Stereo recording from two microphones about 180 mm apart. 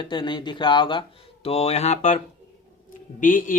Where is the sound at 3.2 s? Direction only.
50° left (ahead or behind).